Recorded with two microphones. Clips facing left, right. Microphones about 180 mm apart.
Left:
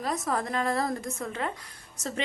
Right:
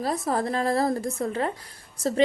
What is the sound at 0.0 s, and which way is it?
A woman's voice, 35° right (ahead or behind).